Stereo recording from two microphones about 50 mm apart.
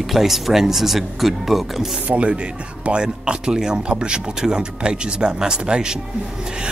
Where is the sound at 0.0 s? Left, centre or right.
Centre.